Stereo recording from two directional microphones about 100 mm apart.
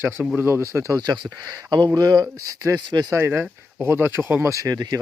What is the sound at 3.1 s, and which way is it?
Speech, 25° right (ahead or behind).